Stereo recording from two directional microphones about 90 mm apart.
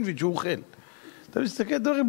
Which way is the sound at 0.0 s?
15° left (ahead or behind).